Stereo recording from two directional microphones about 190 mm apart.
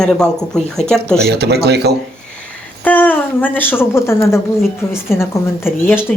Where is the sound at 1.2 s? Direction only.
60° right (ahead or behind).